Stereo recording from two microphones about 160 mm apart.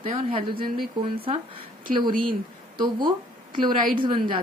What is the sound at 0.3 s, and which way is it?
Speech, 35° right (ahead or behind).